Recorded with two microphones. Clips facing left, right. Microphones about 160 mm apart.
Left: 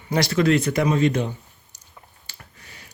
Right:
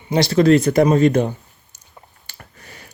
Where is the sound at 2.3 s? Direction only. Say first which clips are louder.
Right 4 dB; 55° right (ahead or behind).